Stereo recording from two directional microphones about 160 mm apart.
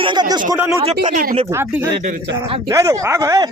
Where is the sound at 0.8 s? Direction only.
40° right (ahead or behind).